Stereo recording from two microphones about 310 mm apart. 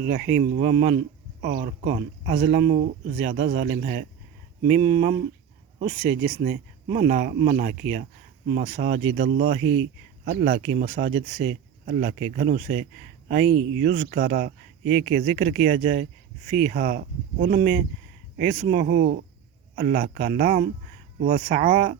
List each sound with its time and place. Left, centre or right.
0.1 s speech: right